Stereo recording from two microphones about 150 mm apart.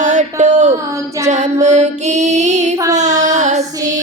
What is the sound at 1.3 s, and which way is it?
Music, 50° right (ahead or behind).